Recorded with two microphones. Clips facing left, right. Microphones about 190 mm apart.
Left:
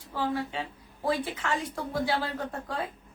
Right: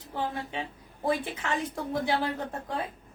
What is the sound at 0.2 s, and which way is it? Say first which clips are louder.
A woman's voice: left 2 dB; 20° right (ahead or behind).